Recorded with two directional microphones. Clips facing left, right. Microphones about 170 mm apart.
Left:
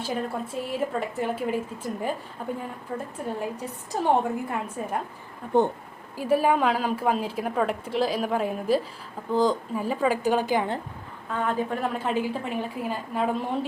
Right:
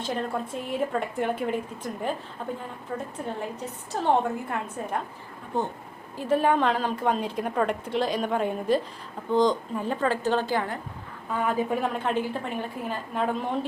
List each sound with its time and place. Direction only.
0.0 s a woman's voice: 5° left (ahead or behind)
5.5 s speech: 65° left (ahead or behind)
6.1 s a woman's voice: 10° left (ahead or behind)
11.3 s a woman's voice: 10° right (ahead or behind)
11.9 s a woman's voice: 5° left (ahead or behind)